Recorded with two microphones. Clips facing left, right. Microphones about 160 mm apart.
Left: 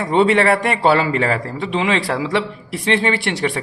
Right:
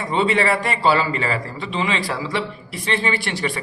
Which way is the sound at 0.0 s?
65° left (ahead or behind).